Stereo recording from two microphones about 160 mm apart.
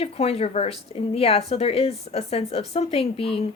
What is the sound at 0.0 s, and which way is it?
A woman's voice, 40° left (ahead or behind).